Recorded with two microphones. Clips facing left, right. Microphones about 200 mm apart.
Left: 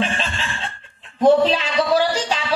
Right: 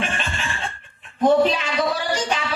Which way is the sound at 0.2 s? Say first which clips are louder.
Left 1 dB; 35° left (ahead or behind).